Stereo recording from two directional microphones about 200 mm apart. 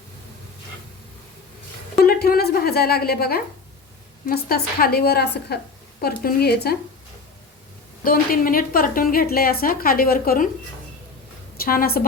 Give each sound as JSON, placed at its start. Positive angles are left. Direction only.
{"t": 2.0, "sound": "a woman's voice", "side_deg": 50}
{"t": 8.0, "sound": "a woman's voice", "side_deg": 45}
{"t": 11.5, "sound": "a woman's voice", "side_deg": 45}